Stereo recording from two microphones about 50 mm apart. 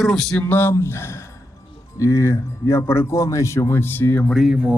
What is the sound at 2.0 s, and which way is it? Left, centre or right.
Speech, left.